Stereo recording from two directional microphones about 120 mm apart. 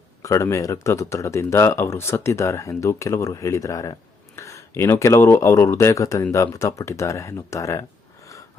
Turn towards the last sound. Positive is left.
turn(degrees=25)  # may be behind; listen again after turning